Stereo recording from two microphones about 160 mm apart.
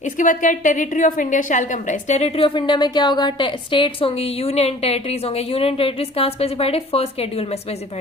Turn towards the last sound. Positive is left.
turn(degrees=40)  # may be behind; listen again after turning